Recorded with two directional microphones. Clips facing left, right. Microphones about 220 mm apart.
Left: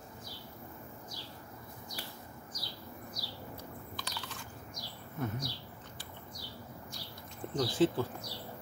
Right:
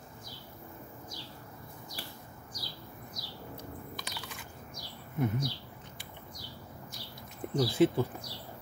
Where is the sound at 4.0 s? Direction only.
15° right (ahead or behind).